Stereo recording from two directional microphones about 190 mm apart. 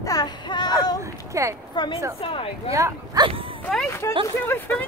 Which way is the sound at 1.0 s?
15° right (ahead or behind).